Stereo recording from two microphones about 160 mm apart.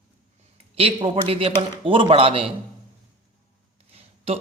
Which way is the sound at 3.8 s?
40° right (ahead or behind).